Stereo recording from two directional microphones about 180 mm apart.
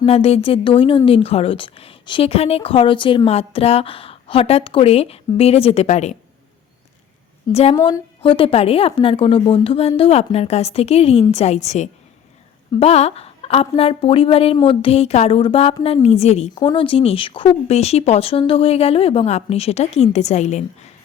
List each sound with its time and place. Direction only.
0.0 s a woman's voice: 35° left (ahead or behind)
7.5 s a woman's voice: 35° left (ahead or behind)